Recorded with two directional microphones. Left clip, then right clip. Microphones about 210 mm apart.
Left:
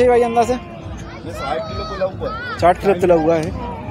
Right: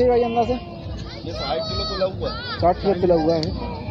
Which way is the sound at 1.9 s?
35° left (ahead or behind).